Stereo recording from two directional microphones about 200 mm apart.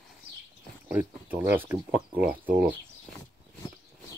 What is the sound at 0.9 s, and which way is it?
Speech, 10° right (ahead or behind).